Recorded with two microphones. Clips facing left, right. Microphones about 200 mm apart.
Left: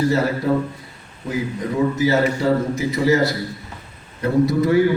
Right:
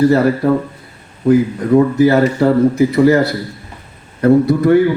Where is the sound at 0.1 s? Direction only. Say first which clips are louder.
Right 6 dB; 60° right (ahead or behind).